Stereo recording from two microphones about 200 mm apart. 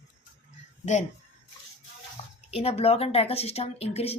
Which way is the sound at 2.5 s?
30° left (ahead or behind).